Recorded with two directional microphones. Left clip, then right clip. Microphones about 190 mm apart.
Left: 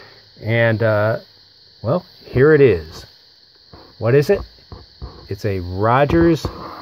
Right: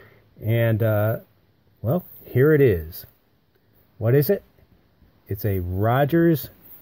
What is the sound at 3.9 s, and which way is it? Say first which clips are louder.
Speech: left 5 dB; 40° right (ahead or behind).